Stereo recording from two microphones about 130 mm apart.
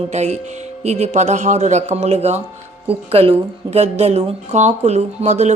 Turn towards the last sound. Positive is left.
turn(degrees=-60)  # may be behind; listen again after turning